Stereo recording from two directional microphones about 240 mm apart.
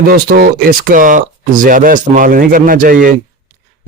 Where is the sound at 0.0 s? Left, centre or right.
Right.